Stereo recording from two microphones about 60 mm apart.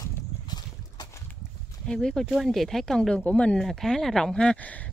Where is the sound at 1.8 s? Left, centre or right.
Centre.